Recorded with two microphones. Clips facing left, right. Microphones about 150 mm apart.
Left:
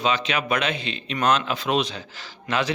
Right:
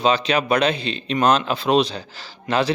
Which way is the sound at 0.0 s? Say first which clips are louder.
Right 5 dB; 35° right (ahead or behind).